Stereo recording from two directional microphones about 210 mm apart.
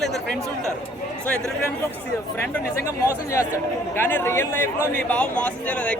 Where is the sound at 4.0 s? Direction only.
10° left (ahead or behind).